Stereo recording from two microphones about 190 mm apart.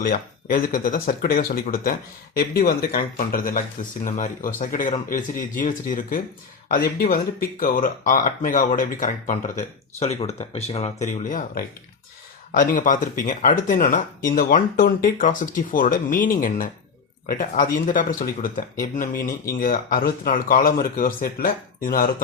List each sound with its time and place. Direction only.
0.0 s speech: 50° left (ahead or behind)